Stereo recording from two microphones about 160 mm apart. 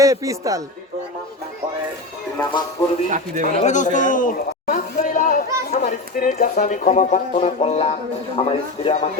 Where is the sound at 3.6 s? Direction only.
50° left (ahead or behind).